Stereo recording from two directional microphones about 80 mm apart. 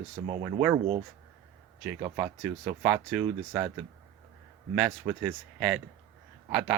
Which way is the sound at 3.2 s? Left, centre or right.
Right.